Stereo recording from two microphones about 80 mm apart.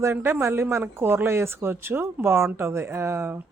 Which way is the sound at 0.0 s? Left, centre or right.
Right.